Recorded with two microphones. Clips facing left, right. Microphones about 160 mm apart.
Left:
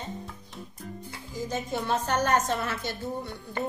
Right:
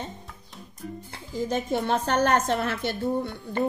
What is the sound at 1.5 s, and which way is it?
A woman's voice, 55° right (ahead or behind).